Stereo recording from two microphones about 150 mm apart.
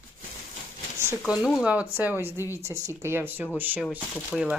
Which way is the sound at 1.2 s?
5° right (ahead or behind).